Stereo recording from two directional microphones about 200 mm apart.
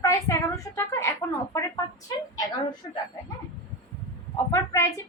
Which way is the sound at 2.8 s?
25° left (ahead or behind).